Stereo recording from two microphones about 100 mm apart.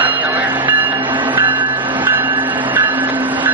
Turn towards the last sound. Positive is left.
turn(degrees=-15)  # may be behind; listen again after turning